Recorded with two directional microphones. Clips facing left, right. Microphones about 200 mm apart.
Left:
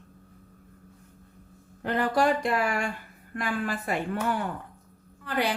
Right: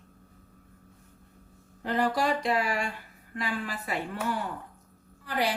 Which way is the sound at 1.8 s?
55° left (ahead or behind).